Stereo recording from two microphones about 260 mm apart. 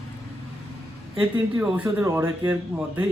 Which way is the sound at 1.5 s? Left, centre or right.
Centre.